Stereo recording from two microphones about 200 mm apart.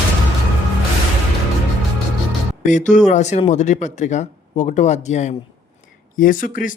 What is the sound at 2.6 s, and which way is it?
Speech, 40° left (ahead or behind).